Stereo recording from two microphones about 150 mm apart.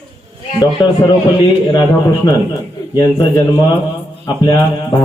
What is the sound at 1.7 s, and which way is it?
A man's voice, 30° left (ahead or behind).